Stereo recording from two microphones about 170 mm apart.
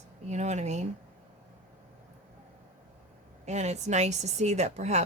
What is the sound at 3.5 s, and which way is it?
Speech, 40° right (ahead or behind).